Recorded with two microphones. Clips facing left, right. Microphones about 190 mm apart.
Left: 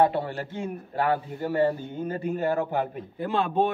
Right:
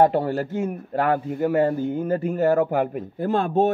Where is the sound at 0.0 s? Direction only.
45° right (ahead or behind).